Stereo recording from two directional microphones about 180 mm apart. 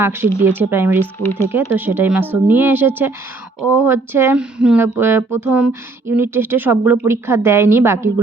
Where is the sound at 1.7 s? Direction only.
10° right (ahead or behind).